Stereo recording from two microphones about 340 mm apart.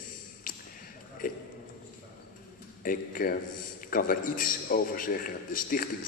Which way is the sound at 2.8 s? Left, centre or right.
Left.